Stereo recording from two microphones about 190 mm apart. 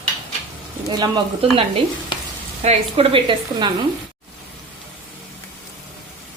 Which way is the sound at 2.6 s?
35° right (ahead or behind).